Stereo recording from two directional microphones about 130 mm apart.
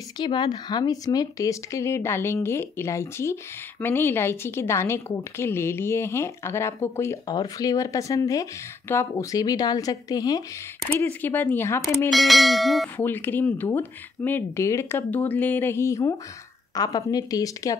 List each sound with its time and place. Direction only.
0.2 s a woman's voice: 35° left (ahead or behind)
11.1 s speech: 15° left (ahead or behind)
12.1 s a sound: centre (ahead or behind)
12.9 s a woman's voice: 15° left (ahead or behind)